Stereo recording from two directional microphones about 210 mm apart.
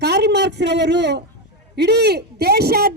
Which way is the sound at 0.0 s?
50° right (ahead or behind).